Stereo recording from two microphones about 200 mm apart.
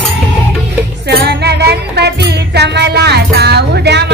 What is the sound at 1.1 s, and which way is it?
Music, 55° right (ahead or behind).